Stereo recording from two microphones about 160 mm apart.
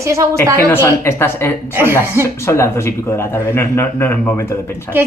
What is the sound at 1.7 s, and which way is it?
Speech, 15° right (ahead or behind).